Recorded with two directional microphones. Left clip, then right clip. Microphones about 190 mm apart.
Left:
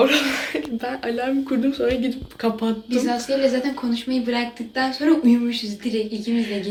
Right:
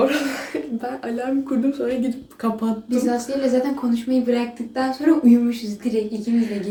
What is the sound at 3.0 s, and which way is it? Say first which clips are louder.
A woman's voice: left 2 dB; 20° right (ahead or behind).